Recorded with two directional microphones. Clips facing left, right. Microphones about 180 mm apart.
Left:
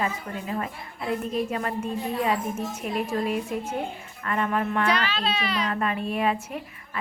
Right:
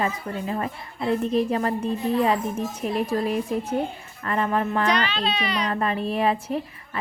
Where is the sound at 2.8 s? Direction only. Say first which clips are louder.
Right 3 dB; 35° right (ahead or behind).